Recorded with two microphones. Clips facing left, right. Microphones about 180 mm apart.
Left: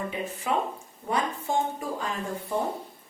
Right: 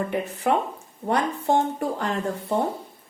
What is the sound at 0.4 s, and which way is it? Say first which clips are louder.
Speech: right 5 dB; 60° right (ahead or behind).